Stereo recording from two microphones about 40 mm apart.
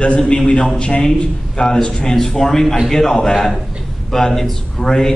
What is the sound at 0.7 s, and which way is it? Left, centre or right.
A man's voice, left.